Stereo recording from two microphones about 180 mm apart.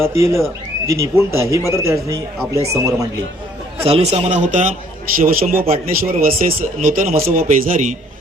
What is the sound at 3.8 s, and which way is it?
A man's voice, 35° right (ahead or behind).